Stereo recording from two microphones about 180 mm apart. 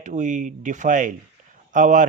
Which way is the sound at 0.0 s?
45° right (ahead or behind).